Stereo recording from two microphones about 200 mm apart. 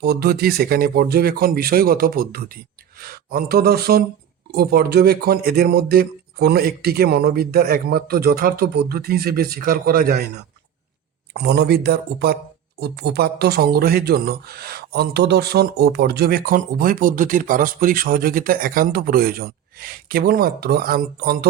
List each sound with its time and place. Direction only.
0.0 s speech: 50° right (ahead or behind)
11.3 s speech: 55° right (ahead or behind)